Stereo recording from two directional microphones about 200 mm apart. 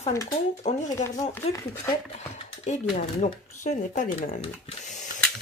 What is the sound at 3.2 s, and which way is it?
Speech, 35° left (ahead or behind).